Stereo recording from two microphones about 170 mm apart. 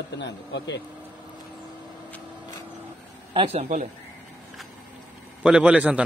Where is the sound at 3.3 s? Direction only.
35° right (ahead or behind).